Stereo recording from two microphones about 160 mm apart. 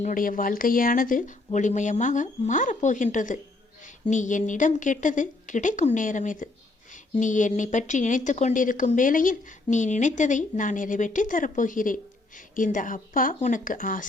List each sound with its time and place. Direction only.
0.0 s a woman's voice: 55° left (ahead or behind)